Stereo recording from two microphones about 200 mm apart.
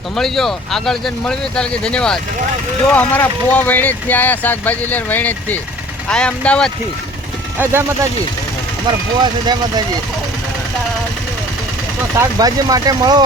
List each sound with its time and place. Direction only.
0.2 s speech: centre (ahead or behind)
7.6 s speech: 10° right (ahead or behind)
9.2 s speech: 20° right (ahead or behind)
12.2 s speech: 20° right (ahead or behind)